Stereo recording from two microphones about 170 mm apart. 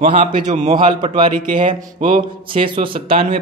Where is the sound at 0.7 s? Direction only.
25° right (ahead or behind).